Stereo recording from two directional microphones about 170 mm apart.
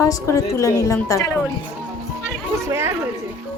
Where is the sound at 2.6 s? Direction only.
15° right (ahead or behind).